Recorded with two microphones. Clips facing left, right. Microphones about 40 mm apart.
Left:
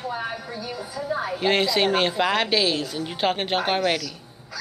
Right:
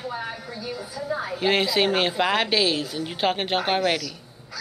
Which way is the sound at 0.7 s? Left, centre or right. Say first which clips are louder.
Left 2 dB; left.